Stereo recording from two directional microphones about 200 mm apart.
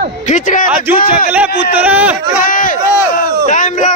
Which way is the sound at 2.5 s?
40° left (ahead or behind).